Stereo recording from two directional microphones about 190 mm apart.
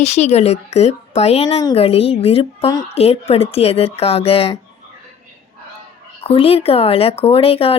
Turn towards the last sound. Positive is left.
turn(degrees=30)  # may be behind; listen again after turning